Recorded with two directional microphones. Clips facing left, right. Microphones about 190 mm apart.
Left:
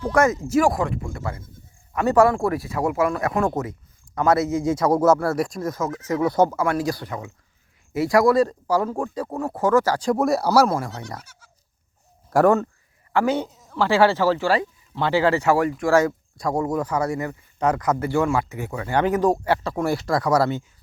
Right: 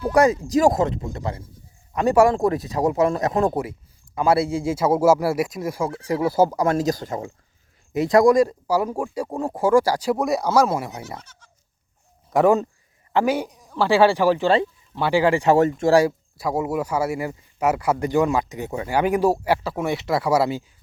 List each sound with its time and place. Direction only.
0.0 s a sound: 15° right (ahead or behind)
0.6 s speech: 20° right (ahead or behind)
4.2 s speech: 30° right (ahead or behind)
4.8 s speech: 10° right (ahead or behind)
5.9 s speech: 30° right (ahead or behind)
6.3 s speech: 5° right (ahead or behind)
6.9 s speech: 45° right (ahead or behind)
7.9 s speech: 20° right (ahead or behind)
10.2 s speech: centre (ahead or behind)
11.2 s goat: 10° left (ahead or behind)
12.3 s speech: centre (ahead or behind); by 18.9 s 25° right (ahead or behind)
18.9 s speech: 10° right (ahead or behind)